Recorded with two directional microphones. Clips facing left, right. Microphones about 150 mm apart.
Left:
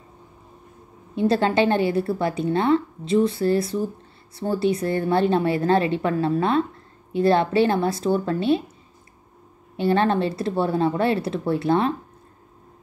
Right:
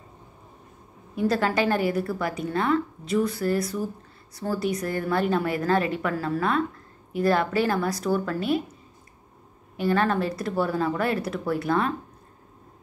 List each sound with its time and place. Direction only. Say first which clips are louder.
1.1 s a woman's voice: left 4 dB; 25° left (ahead or behind)
9.8 s a woman's voice: left 3 dB; 30° left (ahead or behind)